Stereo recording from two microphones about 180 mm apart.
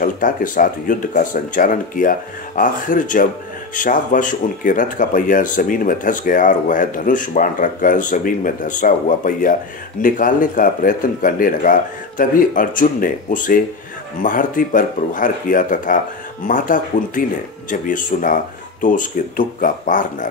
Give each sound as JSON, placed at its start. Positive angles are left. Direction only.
{"t": 0.0, "sound": "speech", "side_deg": 50}